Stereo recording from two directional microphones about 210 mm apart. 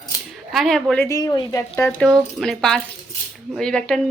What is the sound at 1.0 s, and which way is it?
Speech, 15° left (ahead or behind).